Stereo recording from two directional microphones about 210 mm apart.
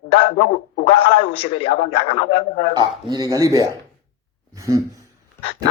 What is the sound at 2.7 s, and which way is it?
Speech, 20° right (ahead or behind).